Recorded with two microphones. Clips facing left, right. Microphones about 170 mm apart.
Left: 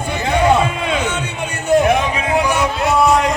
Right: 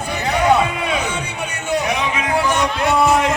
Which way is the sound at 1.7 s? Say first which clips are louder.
Left 8 dB; 50° left (ahead or behind).